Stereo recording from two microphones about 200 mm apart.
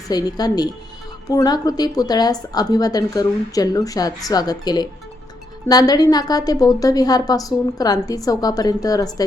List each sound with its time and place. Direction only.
0.1 s speech: 20° left (ahead or behind)